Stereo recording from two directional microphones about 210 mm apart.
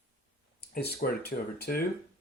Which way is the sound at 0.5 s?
50° left (ahead or behind).